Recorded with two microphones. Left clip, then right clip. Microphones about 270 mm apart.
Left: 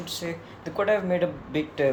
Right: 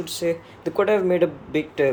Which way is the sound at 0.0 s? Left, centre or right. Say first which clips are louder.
Right 8 dB; right.